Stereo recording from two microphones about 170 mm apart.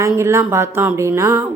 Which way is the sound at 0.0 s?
15° right (ahead or behind).